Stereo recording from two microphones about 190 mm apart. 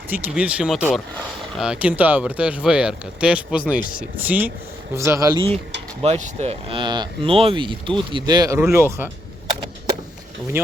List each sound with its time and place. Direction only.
0.1 s speech: 5° right (ahead or behind); by 5.5 s 25° right (ahead or behind)
6.0 s speech: 35° right (ahead or behind); by 9.0 s 10° right (ahead or behind)